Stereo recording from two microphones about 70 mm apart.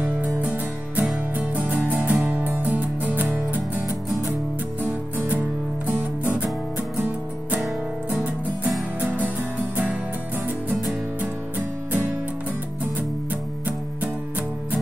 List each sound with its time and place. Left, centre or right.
0.0 s music: right
4.8 s music: right